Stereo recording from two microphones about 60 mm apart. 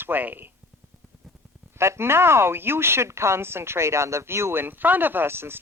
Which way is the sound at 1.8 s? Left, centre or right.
Right.